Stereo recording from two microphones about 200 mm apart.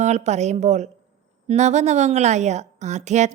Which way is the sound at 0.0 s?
35° right (ahead or behind).